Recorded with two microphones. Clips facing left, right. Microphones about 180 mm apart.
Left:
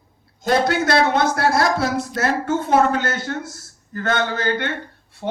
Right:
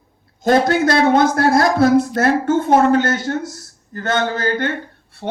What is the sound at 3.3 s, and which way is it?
Speech, 40° right (ahead or behind).